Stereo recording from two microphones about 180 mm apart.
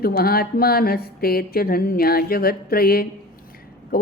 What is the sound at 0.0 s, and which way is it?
Speech, 60° left (ahead or behind).